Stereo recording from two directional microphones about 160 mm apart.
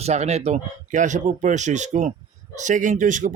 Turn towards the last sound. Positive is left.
turn(degrees=-55)  # may be behind; listen again after turning